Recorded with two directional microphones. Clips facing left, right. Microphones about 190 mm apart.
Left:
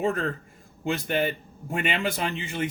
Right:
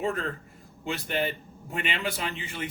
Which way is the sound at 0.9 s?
50° left (ahead or behind).